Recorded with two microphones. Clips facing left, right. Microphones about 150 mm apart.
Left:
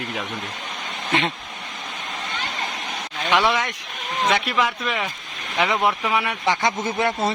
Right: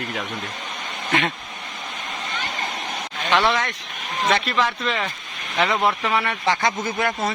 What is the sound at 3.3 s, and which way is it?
A man's voice, 10° left (ahead or behind).